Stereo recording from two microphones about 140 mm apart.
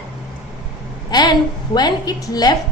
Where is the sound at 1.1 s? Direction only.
30° left (ahead or behind).